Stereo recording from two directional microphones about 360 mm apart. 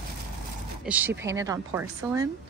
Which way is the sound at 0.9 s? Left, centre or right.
Centre.